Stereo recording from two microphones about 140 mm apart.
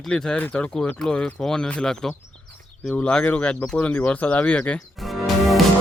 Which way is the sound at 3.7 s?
10° left (ahead or behind).